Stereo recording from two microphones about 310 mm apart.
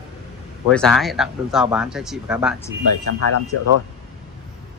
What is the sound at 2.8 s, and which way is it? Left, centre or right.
Speech, left.